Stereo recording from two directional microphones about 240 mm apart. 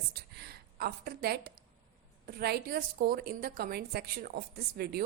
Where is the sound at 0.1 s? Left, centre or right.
Right.